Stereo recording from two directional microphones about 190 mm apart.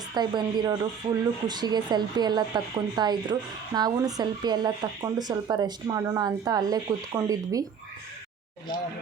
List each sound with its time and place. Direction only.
0.1 s speech: 20° right (ahead or behind)